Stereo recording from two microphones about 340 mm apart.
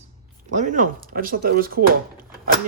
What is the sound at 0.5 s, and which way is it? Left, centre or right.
Speech, right.